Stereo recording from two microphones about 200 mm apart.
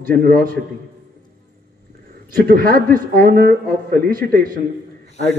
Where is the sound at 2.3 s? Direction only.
45° right (ahead or behind).